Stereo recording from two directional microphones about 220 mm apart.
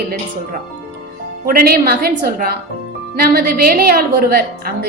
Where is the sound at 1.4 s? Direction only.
40° right (ahead or behind).